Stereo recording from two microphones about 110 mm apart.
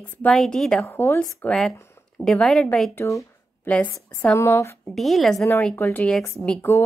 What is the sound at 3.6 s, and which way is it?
Speech, 15° left (ahead or behind).